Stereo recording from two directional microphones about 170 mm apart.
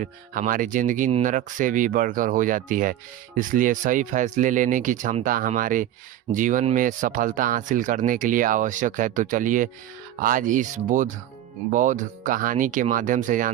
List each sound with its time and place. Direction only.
0.0 s speech: 50° right (ahead or behind)